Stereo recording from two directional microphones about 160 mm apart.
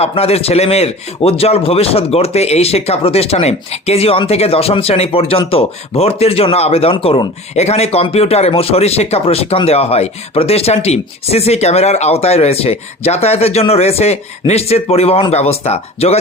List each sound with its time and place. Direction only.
0.0 s a man's voice: 40° left (ahead or behind)